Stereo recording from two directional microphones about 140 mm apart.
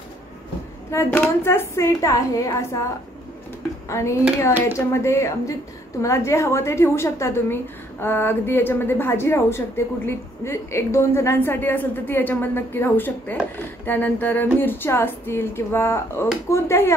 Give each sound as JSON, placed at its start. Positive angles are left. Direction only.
{"t": 0.9, "sound": "a woman's voice", "side_deg": 20}
{"t": 3.9, "sound": "a woman's voice", "side_deg": 20}